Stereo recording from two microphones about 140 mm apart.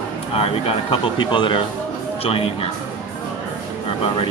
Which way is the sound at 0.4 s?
45° left (ahead or behind).